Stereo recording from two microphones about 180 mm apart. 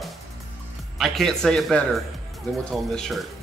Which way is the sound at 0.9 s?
Centre (ahead or behind).